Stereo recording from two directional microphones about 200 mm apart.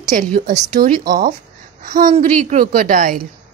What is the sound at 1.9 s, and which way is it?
Speech, 40° right (ahead or behind).